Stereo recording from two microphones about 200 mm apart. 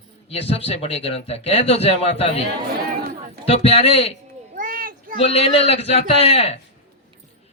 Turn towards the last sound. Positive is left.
turn(degrees=30)  # may be behind; listen again after turning